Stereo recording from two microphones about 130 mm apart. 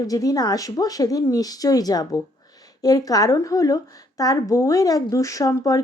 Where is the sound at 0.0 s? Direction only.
30° left (ahead or behind).